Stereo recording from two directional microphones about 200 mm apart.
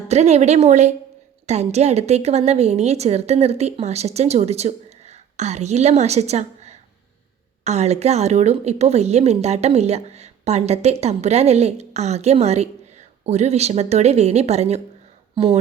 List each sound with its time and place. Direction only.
0.1 s a woman's voice: 35° right (ahead or behind)